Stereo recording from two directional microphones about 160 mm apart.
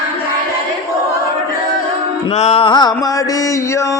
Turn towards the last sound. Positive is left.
turn(degrees=30)  # may be behind; listen again after turning